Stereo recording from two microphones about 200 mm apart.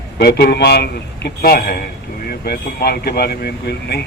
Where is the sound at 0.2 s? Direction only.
50° left (ahead or behind).